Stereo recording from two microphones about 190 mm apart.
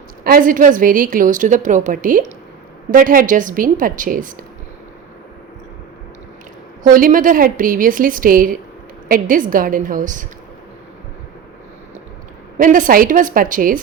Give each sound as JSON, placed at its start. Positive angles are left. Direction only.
{"t": 0.3, "sound": "a woman's voice", "side_deg": -45}
{"t": 6.8, "sound": "a woman's voice", "side_deg": -45}
{"t": 12.5, "sound": "a woman's voice", "side_deg": -45}